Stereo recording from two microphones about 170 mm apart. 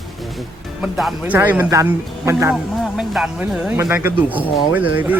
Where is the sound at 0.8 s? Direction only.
Centre (ahead or behind).